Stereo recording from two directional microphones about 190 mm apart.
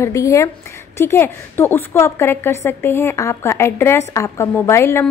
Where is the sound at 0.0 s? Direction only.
15° left (ahead or behind).